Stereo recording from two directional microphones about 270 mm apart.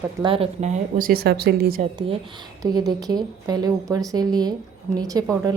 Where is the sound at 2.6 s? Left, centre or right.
Centre.